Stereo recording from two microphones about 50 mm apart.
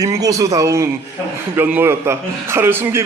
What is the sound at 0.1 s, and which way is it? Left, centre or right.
Speech, right.